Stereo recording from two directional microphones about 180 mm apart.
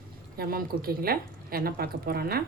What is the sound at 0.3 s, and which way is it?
A woman's voice, 55° right (ahead or behind).